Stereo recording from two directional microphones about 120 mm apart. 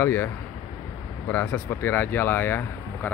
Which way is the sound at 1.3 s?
20° left (ahead or behind).